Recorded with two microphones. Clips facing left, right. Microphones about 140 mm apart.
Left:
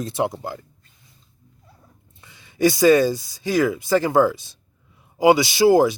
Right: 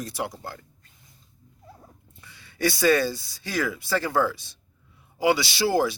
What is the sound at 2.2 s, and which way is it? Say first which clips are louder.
Speech: left 7 dB; 20° left (ahead or behind).